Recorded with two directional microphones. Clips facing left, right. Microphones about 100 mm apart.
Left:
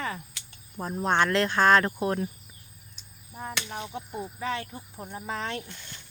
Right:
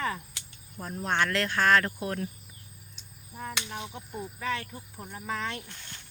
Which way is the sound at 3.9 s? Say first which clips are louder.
Left 3 dB; 25° left (ahead or behind).